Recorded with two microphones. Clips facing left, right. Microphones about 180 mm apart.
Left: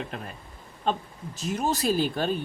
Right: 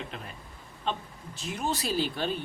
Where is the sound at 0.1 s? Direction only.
45° left (ahead or behind).